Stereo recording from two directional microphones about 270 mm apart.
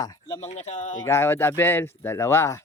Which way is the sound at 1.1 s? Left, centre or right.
Centre.